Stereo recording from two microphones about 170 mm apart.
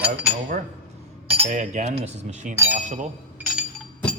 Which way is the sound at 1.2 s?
35° right (ahead or behind).